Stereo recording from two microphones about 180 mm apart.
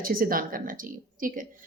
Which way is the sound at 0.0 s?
50° right (ahead or behind).